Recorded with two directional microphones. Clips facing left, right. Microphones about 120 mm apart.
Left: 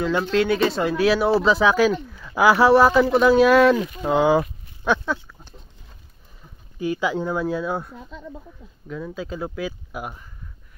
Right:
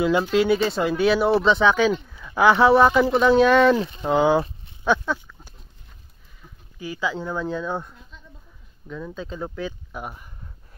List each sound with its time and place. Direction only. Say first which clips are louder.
0.0 s speech: right 1 dB; 5° right (ahead or behind)
3.7 s speech: even; 30° right (ahead or behind)
4.0 s speech: left 1 dB; centre (ahead or behind)
4.8 s goat: even; centre (ahead or behind)
6.8 s speech: left 5 dB; 15° left (ahead or behind)